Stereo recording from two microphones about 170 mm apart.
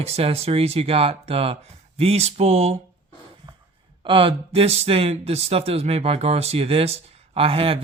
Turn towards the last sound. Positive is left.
turn(degrees=-35)  # may be behind; listen again after turning